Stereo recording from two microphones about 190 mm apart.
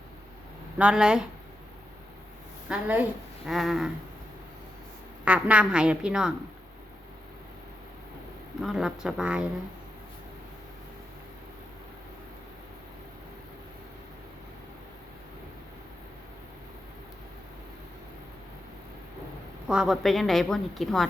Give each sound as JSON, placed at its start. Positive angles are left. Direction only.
{"t": 0.8, "sound": "a woman's voice", "side_deg": -5}
{"t": 2.6, "sound": "a woman's voice", "side_deg": -5}
{"t": 5.2, "sound": "a woman's voice", "side_deg": -5}
{"t": 8.6, "sound": "a woman's voice", "side_deg": 0}
{"t": 19.6, "sound": "a woman's voice", "side_deg": -5}